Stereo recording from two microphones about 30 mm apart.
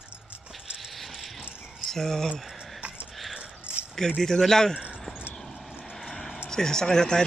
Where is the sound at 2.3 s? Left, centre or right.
Centre.